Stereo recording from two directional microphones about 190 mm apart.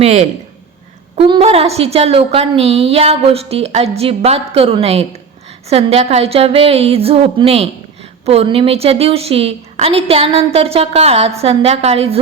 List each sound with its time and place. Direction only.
0.0 s a woman's voice: 35° right (ahead or behind)